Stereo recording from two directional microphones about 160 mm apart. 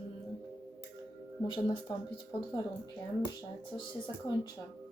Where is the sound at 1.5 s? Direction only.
30° left (ahead or behind).